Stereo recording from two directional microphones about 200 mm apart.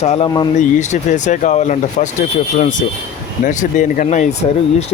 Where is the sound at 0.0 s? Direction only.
30° left (ahead or behind).